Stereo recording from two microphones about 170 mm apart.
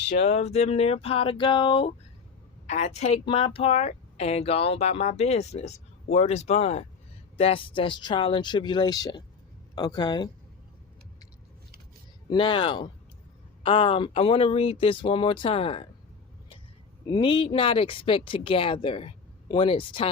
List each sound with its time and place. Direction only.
0.3 s speech: 40° left (ahead or behind)
2.6 s speech: 45° left (ahead or behind); by 10.2 s 25° left (ahead or behind)
12.3 s speech: 30° left (ahead or behind)
17.1 s speech: 30° left (ahead or behind)